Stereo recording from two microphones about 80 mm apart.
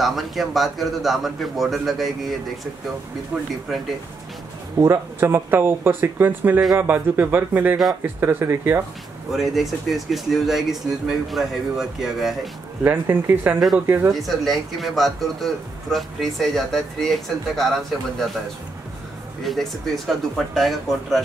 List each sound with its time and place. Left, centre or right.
0.0 s a man's voice: centre
4.7 s speech: right
5.2 s speech: right
9.3 s a man's voice: centre
12.8 s speech: right
14.1 s a man's voice: centre
19.4 s a man's voice: centre